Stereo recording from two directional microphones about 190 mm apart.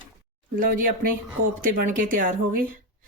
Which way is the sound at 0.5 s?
45° right (ahead or behind).